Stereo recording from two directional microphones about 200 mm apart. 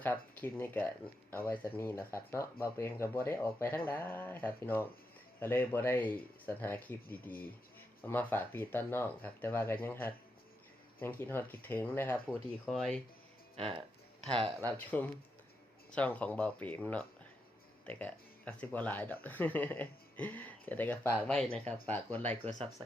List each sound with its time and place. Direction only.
0.0 s speech: 10° left (ahead or behind)
13.6 s speech: 30° right (ahead or behind)
14.8 s speech: 10° left (ahead or behind)